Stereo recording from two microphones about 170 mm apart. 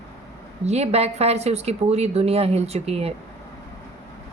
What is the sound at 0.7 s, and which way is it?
Speech, 40° right (ahead or behind).